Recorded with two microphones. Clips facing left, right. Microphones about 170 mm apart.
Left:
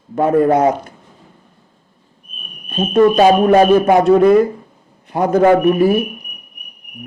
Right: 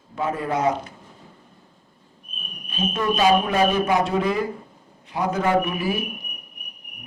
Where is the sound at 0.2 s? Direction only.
55° left (ahead or behind).